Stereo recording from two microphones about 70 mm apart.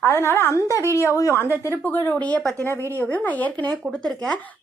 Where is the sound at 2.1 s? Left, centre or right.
Centre.